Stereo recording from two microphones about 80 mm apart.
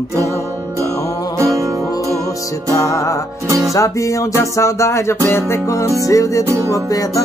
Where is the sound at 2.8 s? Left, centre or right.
Left.